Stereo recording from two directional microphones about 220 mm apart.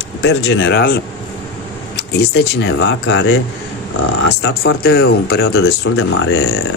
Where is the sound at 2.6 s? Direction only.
55° left (ahead or behind).